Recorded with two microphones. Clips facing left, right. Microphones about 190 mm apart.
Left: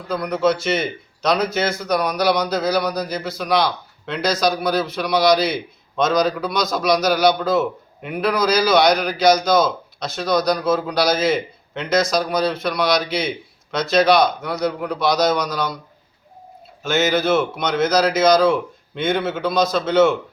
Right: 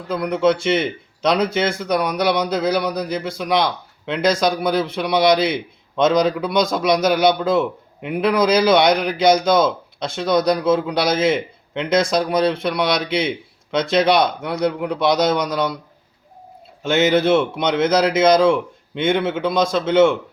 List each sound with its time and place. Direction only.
0.1 s a man's voice: 25° right (ahead or behind)
16.8 s a man's voice: 30° right (ahead or behind)